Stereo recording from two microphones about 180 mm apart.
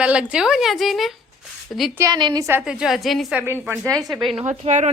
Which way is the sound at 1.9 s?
20° right (ahead or behind).